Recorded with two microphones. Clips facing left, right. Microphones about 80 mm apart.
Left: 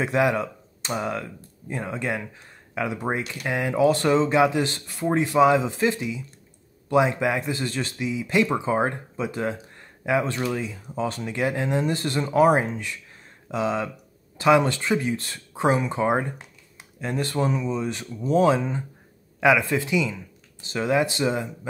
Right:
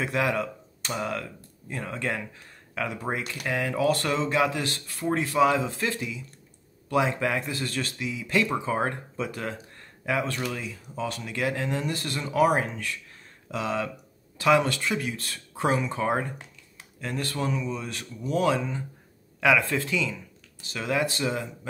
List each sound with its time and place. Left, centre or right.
0.0 s a man's voice: centre
19.4 s speech: centre
20.6 s a man's voice: left